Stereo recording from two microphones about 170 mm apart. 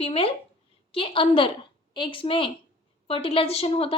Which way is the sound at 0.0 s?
35° left (ahead or behind).